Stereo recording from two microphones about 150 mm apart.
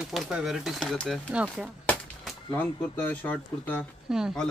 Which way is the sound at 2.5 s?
10° left (ahead or behind).